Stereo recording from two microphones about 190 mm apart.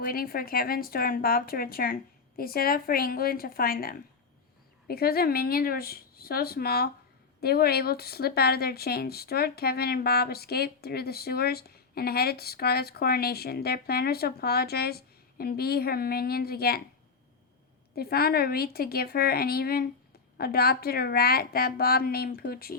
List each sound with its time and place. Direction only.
0.0 s speech: 50° left (ahead or behind)
17.9 s speech: 55° left (ahead or behind)